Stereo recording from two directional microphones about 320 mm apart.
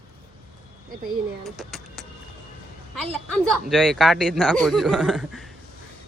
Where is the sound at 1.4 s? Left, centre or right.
Centre.